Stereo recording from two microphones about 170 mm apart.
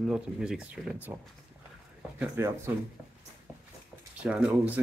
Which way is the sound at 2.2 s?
15° right (ahead or behind).